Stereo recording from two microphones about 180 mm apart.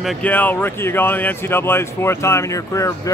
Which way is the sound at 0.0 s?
5° left (ahead or behind).